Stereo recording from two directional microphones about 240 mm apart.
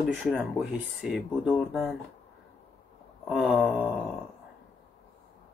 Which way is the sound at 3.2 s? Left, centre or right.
Centre.